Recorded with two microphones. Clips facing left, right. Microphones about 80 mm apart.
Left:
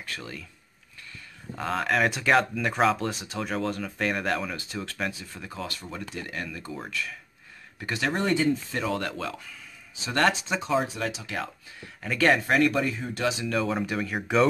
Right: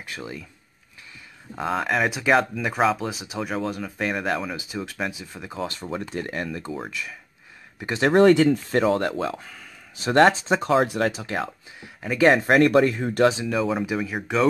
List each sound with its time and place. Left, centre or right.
0.0 s speech: centre
1.5 s speech: centre; by 6.0 s right
6.1 s speech: right
6.7 s speech: centre
8.1 s speech: right
8.6 s speech: right
9.2 s speech: right
9.5 s a sound: right
10.2 s speech: right
10.6 s speech: right
11.1 s speech: right
11.8 s speech: centre
12.4 s speech: right
13.5 s speech: centre